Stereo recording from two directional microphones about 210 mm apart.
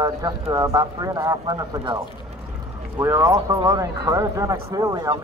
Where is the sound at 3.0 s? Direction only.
15° right (ahead or behind).